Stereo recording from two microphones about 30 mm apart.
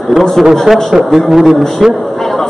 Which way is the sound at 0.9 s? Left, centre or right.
Centre.